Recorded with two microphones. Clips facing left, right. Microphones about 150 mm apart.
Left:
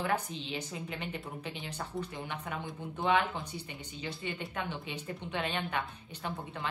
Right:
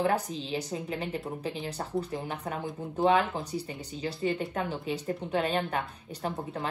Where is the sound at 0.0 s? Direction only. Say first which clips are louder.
Right 5 dB; 35° right (ahead or behind).